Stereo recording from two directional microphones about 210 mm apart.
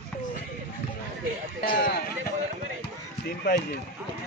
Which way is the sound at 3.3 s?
50° left (ahead or behind).